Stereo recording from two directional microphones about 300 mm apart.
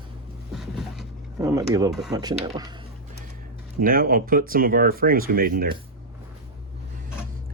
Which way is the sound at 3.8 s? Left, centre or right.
Right.